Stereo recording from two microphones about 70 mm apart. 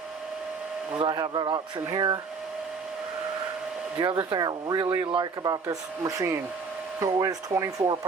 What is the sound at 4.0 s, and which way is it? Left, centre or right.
Speech, right.